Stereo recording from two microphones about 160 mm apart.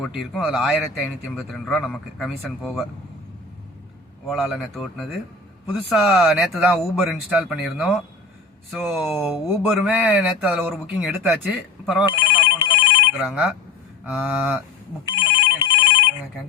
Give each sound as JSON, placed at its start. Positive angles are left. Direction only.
{"t": 0.0, "sound": "a man's voice", "side_deg": 0}
{"t": 4.3, "sound": "a man's voice", "side_deg": 0}
{"t": 11.3, "sound": "a man's voice", "side_deg": 0}
{"t": 12.0, "sound": "telephone bell ringing", "side_deg": 25}
{"t": 13.2, "sound": "a man's voice", "side_deg": -5}
{"t": 15.0, "sound": "telephone bell ringing", "side_deg": 25}